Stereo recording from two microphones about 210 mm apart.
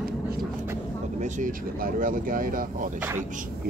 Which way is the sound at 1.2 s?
35° right (ahead or behind).